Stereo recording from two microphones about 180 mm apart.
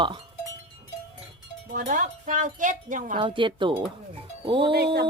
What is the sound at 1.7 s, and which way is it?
Wind chime, 45° right (ahead or behind).